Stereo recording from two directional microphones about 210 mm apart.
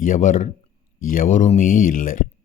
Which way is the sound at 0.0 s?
40° left (ahead or behind).